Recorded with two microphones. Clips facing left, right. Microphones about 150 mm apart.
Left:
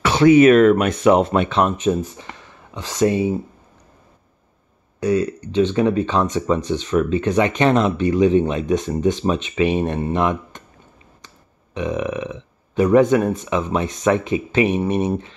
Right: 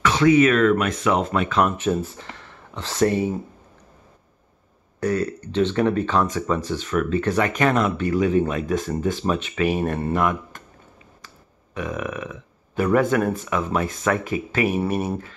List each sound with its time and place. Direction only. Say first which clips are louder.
0.0 s a sound: left 4 dB; 30° left (ahead or behind)
0.4 s speech: left 6 dB; 35° left (ahead or behind); by 3.3 s 15° left (ahead or behind)
5.0 s speech: left 4 dB; 15° left (ahead or behind)